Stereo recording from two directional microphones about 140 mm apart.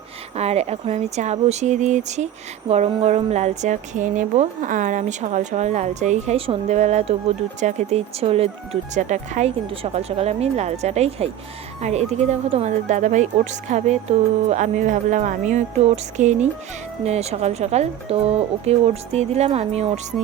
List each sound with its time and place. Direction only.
0.3 s speech: 50° right (ahead or behind)
9.6 s speech: 45° right (ahead or behind)